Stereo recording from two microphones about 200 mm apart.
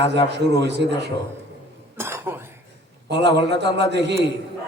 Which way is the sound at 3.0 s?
55° right (ahead or behind).